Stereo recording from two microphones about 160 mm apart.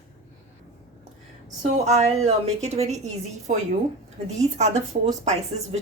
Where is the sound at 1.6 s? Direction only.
45° right (ahead or behind).